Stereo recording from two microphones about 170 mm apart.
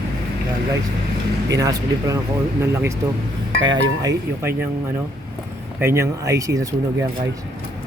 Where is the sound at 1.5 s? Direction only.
20° right (ahead or behind).